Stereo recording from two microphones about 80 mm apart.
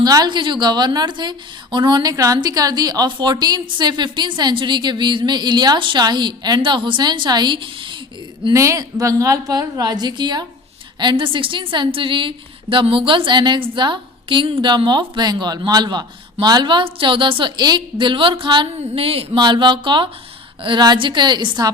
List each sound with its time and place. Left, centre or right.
0.0 s a woman's voice: right
3.1 s a woman's voice: right
8.5 s a woman's voice: right
11.0 s a woman's voice: right
19.3 s a woman's voice: right
20.6 s a woman's voice: right